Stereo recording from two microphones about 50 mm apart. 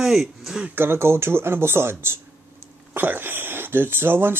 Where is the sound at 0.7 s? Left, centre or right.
Right.